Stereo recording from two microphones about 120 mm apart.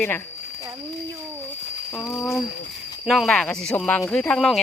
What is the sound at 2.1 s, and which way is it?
Speech, 25° left (ahead or behind).